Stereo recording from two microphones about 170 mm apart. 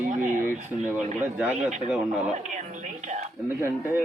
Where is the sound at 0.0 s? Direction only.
50° right (ahead or behind).